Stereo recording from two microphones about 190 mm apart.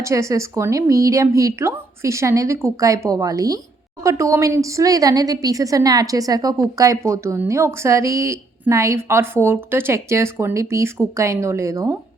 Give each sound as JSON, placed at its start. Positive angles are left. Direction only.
{"t": 0.0, "sound": "a woman's voice", "side_deg": -15}